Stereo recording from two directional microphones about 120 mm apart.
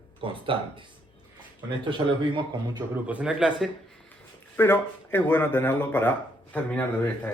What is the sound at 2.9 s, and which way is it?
Speech, 10° right (ahead or behind).